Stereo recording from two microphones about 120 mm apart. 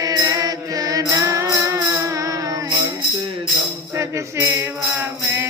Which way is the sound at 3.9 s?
25° right (ahead or behind).